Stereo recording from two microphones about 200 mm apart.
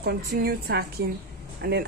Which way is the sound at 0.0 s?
50° right (ahead or behind).